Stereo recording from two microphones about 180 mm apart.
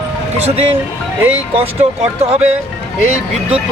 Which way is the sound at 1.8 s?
35° right (ahead or behind).